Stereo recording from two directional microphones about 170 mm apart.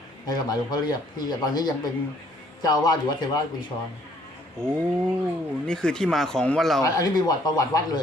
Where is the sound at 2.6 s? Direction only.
20° left (ahead or behind).